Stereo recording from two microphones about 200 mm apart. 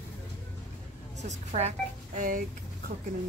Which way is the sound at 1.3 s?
35° right (ahead or behind).